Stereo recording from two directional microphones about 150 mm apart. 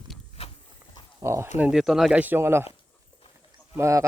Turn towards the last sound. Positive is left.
turn(degrees=-20)  # may be behind; listen again after turning